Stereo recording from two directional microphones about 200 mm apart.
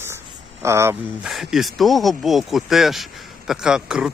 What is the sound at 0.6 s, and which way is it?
Speech, 15° right (ahead or behind).